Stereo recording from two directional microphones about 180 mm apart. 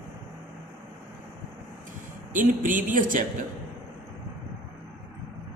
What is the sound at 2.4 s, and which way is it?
Speech, 50° right (ahead or behind).